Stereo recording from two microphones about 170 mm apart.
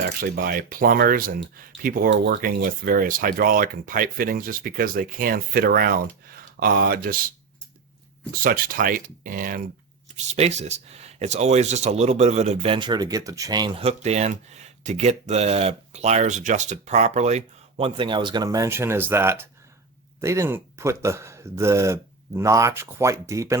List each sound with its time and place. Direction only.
0.2 s speech: 60° right (ahead or behind)
8.3 s speech: 60° right (ahead or behind)
10.2 s speech: 40° right (ahead or behind); by 23.6 s 20° right (ahead or behind)